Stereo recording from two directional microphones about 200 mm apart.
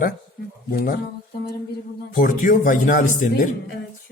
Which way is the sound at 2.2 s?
40° left (ahead or behind).